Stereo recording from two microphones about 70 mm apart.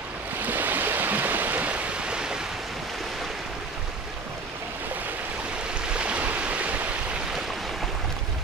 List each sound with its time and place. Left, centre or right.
0.4 s stream: right
5.9 s stream: centre